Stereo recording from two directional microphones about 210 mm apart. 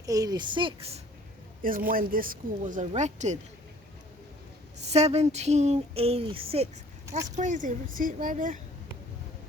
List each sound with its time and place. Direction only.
0.0 s a woman's voice: 15° right (ahead or behind)
1.6 s speech: 40° right (ahead or behind)
4.9 s speech: 30° right (ahead or behind)